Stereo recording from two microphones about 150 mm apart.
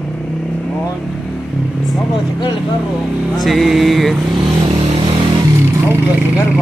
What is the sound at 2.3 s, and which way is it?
Speech, 30° left (ahead or behind).